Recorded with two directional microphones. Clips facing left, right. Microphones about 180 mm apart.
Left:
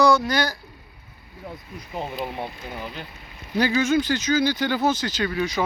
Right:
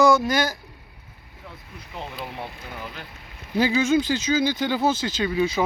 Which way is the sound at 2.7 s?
20° left (ahead or behind).